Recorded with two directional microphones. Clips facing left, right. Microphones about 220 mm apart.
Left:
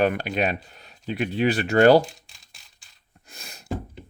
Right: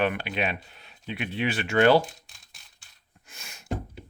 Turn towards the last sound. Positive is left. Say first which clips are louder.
# left 4 dB
turn(degrees=35)  # may be behind; listen again after turning